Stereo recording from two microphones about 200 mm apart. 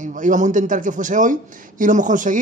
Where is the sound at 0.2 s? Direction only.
40° right (ahead or behind).